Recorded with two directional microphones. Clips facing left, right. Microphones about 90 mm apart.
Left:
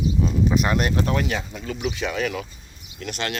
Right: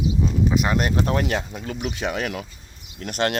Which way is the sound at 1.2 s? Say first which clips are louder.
Right 2 dB; 50° right (ahead or behind).